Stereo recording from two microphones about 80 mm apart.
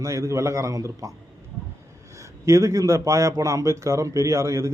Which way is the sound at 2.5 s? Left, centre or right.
Right.